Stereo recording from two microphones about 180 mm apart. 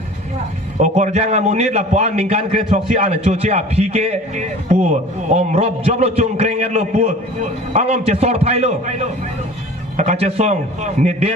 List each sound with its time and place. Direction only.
0.8 s a man's voice: 40° right (ahead or behind)